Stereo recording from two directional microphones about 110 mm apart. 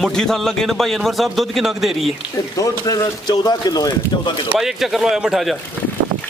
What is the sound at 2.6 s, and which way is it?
Speech, 35° left (ahead or behind).